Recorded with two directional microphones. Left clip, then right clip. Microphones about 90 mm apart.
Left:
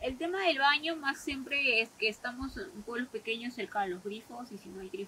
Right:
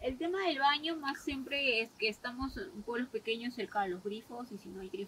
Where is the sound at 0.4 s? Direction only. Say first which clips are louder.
Left 4 dB; 5° left (ahead or behind).